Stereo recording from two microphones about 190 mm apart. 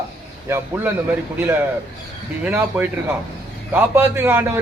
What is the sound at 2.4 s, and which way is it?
A man's voice, 10° right (ahead or behind).